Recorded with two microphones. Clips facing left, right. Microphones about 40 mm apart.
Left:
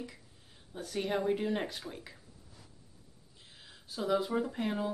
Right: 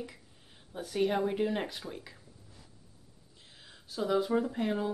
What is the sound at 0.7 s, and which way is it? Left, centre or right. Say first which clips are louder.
Speech: right 4 dB; centre.